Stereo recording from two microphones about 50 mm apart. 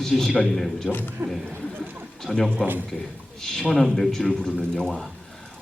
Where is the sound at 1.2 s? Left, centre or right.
Right.